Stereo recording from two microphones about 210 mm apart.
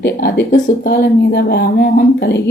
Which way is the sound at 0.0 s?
50° left (ahead or behind).